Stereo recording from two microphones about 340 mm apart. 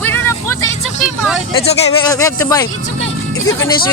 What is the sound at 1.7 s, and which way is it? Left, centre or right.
Speech, centre.